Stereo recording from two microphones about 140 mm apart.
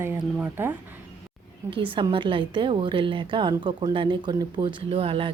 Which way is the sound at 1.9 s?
40° right (ahead or behind).